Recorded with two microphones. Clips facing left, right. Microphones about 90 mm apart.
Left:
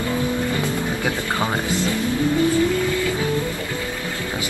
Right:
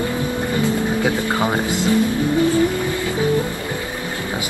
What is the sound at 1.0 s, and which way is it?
Speech, 20° right (ahead or behind).